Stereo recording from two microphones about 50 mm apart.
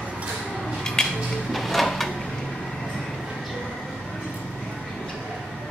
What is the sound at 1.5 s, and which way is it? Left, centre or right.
Drawer open or close, centre.